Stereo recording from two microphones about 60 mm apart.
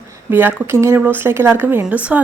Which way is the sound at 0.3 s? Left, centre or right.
Right.